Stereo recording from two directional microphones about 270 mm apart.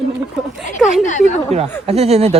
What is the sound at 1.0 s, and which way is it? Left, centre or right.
Speech, left.